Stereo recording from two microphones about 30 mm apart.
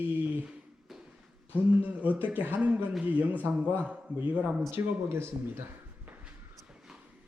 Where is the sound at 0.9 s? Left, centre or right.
Centre.